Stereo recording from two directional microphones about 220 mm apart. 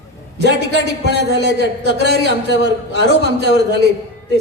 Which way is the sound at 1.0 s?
50° right (ahead or behind).